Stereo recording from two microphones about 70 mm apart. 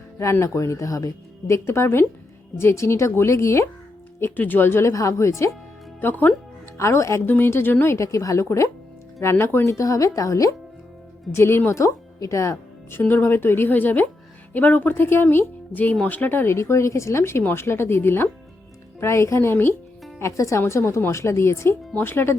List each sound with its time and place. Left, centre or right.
0.2 s speech: left
4.2 s speech: left
6.0 s speech: left
6.7 s speech: left
7.3 s speech: left
7.9 s speech: left
9.6 s speech: left
11.3 s speech: left
13.0 s speech: left
16.6 s speech: left
20.1 s speech: left